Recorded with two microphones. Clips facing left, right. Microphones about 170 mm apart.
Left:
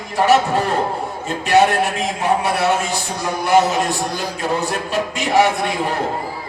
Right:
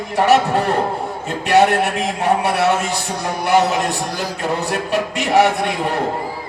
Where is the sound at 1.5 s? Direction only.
65° right (ahead or behind).